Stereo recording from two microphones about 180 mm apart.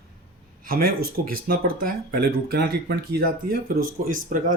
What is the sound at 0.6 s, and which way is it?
Speech, 55° right (ahead or behind).